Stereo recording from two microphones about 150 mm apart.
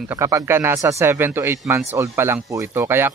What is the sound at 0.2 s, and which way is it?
Speech, 20° right (ahead or behind).